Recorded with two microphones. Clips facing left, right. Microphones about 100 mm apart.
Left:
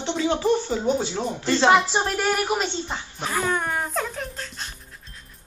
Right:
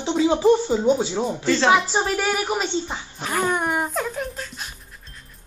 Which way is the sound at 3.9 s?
Centre (ahead or behind).